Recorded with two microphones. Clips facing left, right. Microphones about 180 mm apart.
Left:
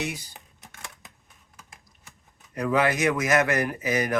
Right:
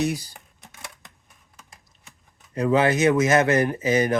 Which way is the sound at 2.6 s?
25° right (ahead or behind).